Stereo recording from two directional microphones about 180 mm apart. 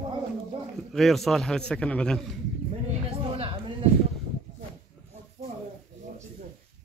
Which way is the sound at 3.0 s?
30° right (ahead or behind).